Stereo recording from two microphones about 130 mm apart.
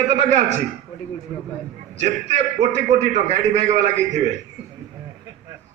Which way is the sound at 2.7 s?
65° right (ahead or behind).